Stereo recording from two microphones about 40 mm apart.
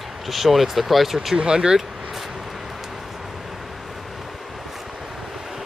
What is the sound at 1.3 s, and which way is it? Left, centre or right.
Speech, right.